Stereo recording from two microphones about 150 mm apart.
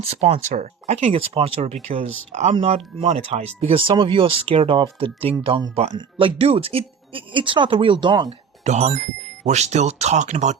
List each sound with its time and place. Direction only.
0.1 s speech: 45° right (ahead or behind)
1.9 s speech: 55° right (ahead or behind); by 8.4 s 30° right (ahead or behind)
8.6 s speech: 50° right (ahead or behind)